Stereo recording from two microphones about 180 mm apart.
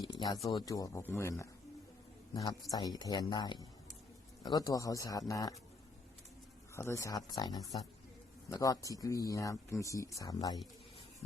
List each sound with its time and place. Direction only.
0.0 s a sound: 25° left (ahead or behind)
0.4 s speech: 20° left (ahead or behind)
6.7 s speech: 15° left (ahead or behind)